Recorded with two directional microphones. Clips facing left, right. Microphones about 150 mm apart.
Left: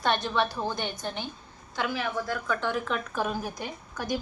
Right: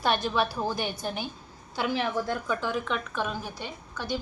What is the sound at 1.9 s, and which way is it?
Speech, 30° right (ahead or behind).